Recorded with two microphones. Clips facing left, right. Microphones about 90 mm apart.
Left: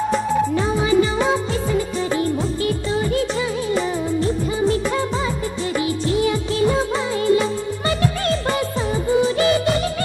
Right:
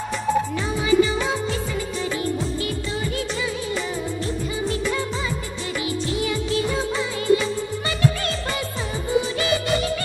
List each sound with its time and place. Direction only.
0.1 s music: 40° left (ahead or behind)
2.1 s music of bollywood: 40° left (ahead or behind)